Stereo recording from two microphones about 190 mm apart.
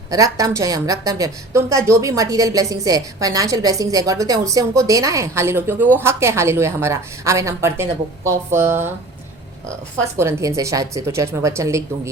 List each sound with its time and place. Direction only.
0.1 s a woman's voice: 20° right (ahead or behind)
10.2 s a woman's voice: 15° right (ahead or behind)